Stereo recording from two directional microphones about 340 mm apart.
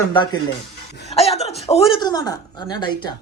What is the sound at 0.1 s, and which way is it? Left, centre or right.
Speech, centre.